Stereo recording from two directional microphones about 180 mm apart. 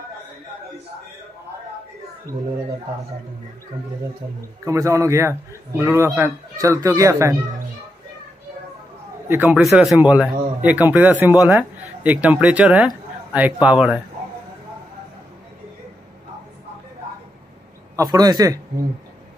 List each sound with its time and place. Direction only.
4.6 s speech: 15° right (ahead or behind)
9.3 s speech: 10° right (ahead or behind)
17.9 s a man's voice: 20° right (ahead or behind)